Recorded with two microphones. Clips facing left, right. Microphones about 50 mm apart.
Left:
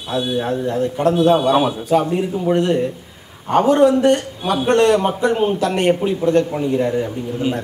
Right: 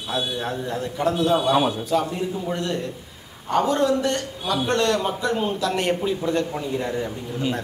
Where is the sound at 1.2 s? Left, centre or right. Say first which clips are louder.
Left 7 dB; left.